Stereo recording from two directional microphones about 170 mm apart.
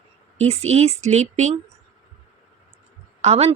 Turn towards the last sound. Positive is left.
turn(degrees=-40)  # may be behind; listen again after turning